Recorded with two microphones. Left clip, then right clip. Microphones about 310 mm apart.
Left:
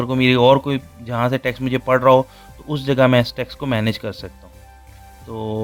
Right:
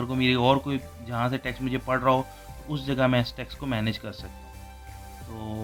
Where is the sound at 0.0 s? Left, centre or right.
Left.